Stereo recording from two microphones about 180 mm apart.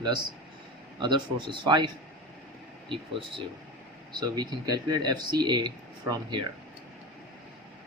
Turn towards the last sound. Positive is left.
turn(degrees=-25)  # may be behind; listen again after turning